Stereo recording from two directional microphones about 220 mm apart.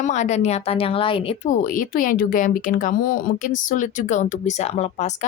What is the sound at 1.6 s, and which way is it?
Speech, 40° left (ahead or behind).